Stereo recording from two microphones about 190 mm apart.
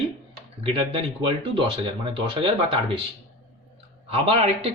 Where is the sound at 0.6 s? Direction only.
30° right (ahead or behind).